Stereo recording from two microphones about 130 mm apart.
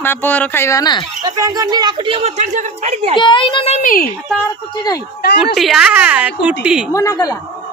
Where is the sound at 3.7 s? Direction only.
90° left.